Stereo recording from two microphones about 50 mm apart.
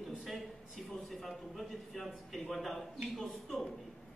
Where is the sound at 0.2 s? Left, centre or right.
Centre.